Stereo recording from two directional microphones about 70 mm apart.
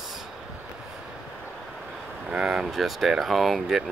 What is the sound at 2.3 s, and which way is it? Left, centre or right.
Speech, centre.